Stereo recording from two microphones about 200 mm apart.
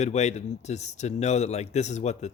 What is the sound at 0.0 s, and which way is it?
Speech, 35° left (ahead or behind).